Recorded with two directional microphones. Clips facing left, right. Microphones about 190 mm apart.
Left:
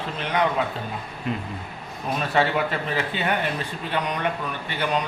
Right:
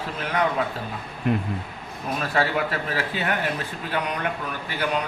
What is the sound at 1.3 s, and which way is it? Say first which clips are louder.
Speech: right 5 dB; 55° right (ahead or behind).